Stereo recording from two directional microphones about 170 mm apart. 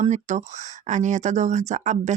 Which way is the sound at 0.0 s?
45° right (ahead or behind).